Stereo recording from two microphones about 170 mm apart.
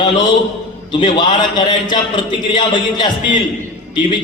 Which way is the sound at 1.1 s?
25° left (ahead or behind).